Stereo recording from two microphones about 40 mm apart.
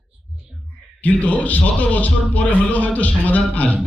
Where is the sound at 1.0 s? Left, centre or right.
Left.